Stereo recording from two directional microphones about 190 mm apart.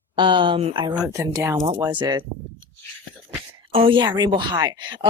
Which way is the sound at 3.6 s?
30° right (ahead or behind).